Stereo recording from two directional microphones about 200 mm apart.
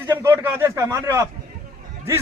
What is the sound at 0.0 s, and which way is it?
A man's voice, 10° right (ahead or behind).